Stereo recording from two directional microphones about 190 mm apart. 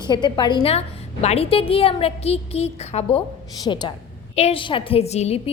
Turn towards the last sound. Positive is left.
turn(degrees=35)  # may be behind; listen again after turning